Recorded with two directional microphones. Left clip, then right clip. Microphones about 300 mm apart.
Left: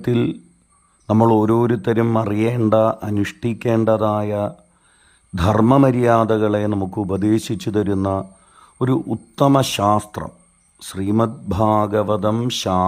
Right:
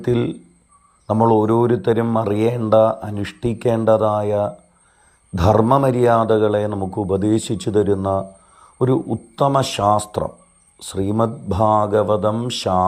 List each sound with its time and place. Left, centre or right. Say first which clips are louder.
0.0 s a man's voice: even; centre
5.6 s speech: left 1 dB; left
5.9 s a man's voice: right 1 dB; centre